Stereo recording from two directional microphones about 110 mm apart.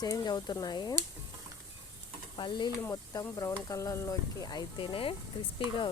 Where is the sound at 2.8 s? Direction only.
25° left (ahead or behind); by 5.6 s 55° left (ahead or behind).